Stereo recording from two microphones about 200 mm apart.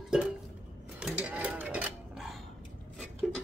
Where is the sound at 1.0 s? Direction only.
5° right (ahead or behind).